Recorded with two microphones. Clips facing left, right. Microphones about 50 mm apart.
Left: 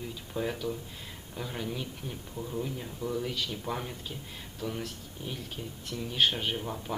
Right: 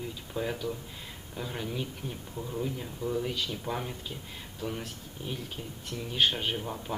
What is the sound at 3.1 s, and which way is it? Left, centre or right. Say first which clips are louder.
Speech: right 1 dB; centre.